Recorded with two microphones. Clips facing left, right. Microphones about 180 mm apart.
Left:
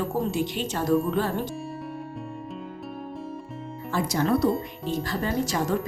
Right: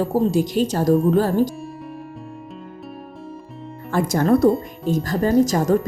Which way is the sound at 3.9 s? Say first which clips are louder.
Right 6 dB; 50° right (ahead or behind).